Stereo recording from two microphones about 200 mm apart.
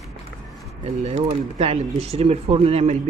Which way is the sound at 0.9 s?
35° right (ahead or behind).